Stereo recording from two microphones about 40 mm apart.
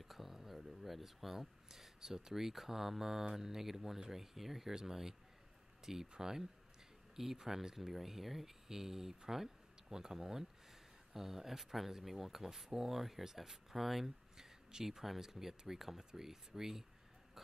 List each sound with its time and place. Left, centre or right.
0.0 s speech: centre